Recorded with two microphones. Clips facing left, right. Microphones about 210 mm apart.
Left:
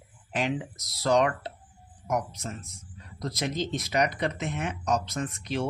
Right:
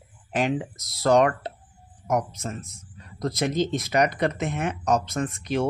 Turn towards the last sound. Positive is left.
turn(degrees=-50)  # may be behind; listen again after turning